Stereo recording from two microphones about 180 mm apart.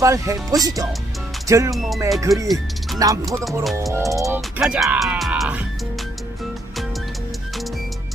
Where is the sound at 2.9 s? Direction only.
20° right (ahead or behind).